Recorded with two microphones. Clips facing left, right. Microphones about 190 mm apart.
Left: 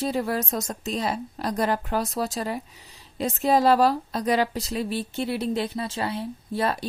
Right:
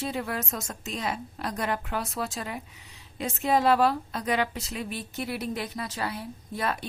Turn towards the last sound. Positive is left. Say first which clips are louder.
# left 5 dB
turn(degrees=30)  # may be behind; listen again after turning